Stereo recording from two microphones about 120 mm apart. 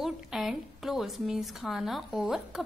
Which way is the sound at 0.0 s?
Centre (ahead or behind).